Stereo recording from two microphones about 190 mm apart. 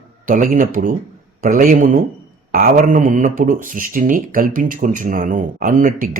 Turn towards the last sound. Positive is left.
turn(degrees=-50)  # may be behind; listen again after turning